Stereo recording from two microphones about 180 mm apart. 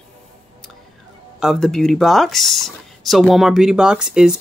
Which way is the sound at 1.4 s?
Centre (ahead or behind).